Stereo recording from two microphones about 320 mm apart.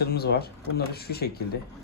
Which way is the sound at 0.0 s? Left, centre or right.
Left.